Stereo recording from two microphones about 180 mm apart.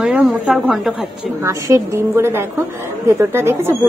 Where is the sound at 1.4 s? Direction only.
15° right (ahead or behind).